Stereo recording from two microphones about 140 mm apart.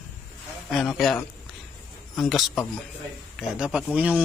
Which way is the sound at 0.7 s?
Centre (ahead or behind).